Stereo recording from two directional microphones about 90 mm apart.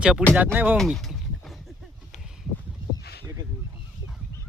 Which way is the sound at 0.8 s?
Centre (ahead or behind).